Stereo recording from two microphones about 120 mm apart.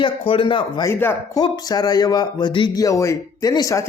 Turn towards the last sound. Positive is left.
turn(degrees=30)  # may be behind; listen again after turning